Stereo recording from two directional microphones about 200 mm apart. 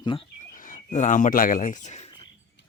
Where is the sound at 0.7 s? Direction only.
40° left (ahead or behind).